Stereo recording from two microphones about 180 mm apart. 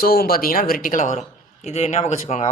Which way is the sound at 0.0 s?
55° left (ahead or behind).